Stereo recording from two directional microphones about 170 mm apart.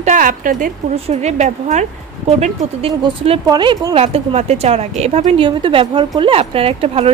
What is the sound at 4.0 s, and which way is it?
A woman's voice, 40° right (ahead or behind).